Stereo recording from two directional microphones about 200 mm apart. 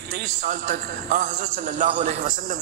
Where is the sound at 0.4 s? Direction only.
45° right (ahead or behind).